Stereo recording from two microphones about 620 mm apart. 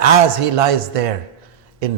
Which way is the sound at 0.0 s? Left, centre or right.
Right.